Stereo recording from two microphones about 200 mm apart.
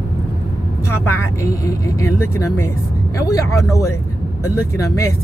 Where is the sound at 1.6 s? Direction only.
15° left (ahead or behind).